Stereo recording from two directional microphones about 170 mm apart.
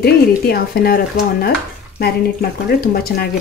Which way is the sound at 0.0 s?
65° left (ahead or behind).